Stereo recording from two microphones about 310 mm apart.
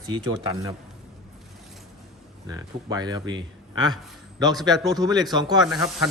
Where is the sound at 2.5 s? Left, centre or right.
Centre.